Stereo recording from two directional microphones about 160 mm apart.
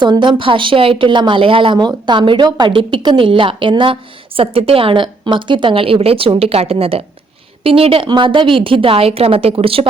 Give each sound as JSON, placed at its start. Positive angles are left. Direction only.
{"t": 0.0, "sound": "speech", "side_deg": -30}